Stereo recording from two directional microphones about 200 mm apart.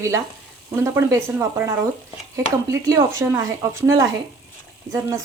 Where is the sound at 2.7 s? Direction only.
15° right (ahead or behind).